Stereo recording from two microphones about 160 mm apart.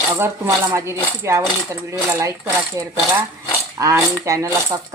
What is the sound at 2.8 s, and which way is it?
Speech, 20° right (ahead or behind).